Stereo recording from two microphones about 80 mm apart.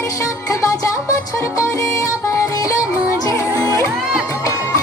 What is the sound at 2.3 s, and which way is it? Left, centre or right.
Music, left.